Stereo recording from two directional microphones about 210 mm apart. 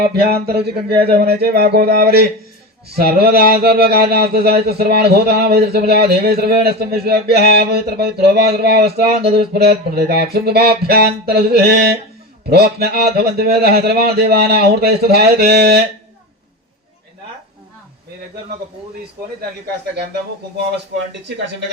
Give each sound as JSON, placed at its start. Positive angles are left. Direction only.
{"t": 0.0, "sound": "speech", "side_deg": -50}